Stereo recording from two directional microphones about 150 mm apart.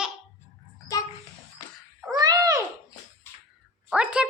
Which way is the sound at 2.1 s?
25° right (ahead or behind).